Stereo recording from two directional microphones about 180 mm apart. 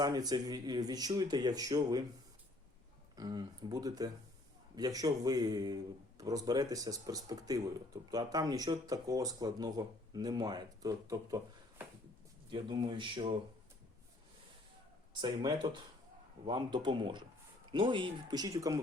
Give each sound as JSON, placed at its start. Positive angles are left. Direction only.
{"t": 0.0, "sound": "speech", "side_deg": -20}
{"t": 3.2, "sound": "speech", "side_deg": -20}
{"t": 12.5, "sound": "speech", "side_deg": -25}
{"t": 15.2, "sound": "speech", "side_deg": -25}